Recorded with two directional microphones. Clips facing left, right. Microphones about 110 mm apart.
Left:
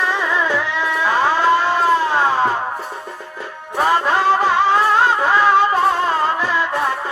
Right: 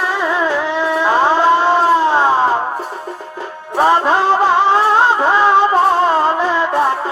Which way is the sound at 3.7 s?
25° right (ahead or behind).